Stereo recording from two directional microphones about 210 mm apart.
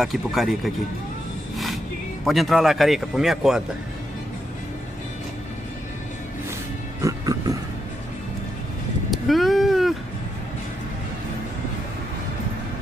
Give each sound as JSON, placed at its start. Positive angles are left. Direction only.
{"t": 0.0, "sound": "speech", "side_deg": 0}
{"t": 2.2, "sound": "speech", "side_deg": 0}
{"t": 7.0, "sound": "music", "side_deg": -15}
{"t": 9.1, "sound": "vehicle", "side_deg": 0}